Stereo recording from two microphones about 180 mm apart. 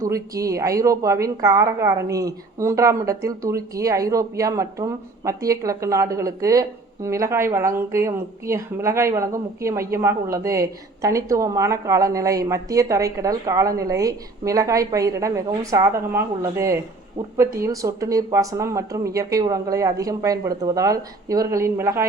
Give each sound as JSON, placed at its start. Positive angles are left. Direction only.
{"t": 0.0, "sound": "a woman's voice", "side_deg": -20}